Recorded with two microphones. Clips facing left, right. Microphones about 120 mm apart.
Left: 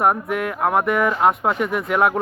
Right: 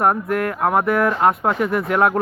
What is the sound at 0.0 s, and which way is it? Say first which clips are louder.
Speech: right 1 dB; centre (ahead or behind).